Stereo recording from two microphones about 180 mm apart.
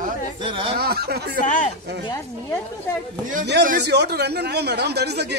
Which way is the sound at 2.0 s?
25° left (ahead or behind).